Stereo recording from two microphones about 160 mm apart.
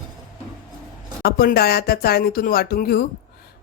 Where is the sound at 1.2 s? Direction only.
70° left (ahead or behind).